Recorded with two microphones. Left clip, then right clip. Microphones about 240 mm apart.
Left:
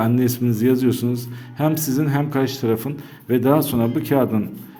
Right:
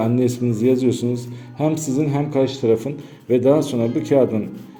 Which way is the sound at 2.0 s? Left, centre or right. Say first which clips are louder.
Right 1 dB; left.